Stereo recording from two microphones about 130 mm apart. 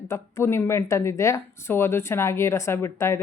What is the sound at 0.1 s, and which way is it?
A woman's voice, 20° left (ahead or behind).